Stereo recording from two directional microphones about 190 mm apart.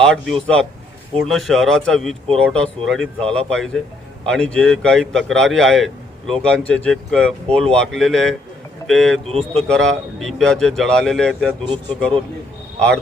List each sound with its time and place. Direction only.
0.0 s a man's voice: 5° left (ahead or behind)